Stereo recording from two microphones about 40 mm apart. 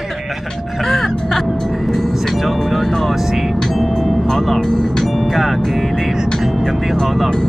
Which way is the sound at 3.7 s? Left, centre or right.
Centre.